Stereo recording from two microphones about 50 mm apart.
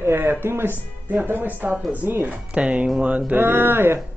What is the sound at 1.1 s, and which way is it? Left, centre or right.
Speech, right.